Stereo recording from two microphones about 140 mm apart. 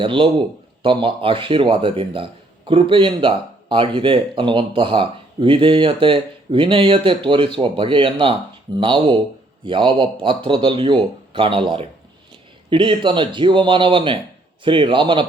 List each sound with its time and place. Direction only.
0.0 s speech: 35° right (ahead or behind)